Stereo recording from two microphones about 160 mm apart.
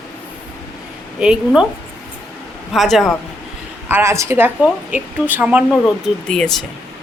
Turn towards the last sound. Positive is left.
turn(degrees=5)  # may be behind; listen again after turning